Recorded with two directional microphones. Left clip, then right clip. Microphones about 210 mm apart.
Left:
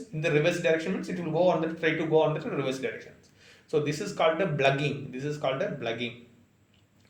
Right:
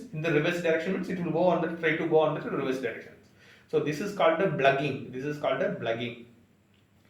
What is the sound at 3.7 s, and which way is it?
A man's voice, 35° left (ahead or behind).